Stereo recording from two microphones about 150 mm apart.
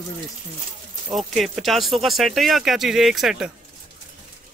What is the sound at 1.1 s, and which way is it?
Speech, centre (ahead or behind).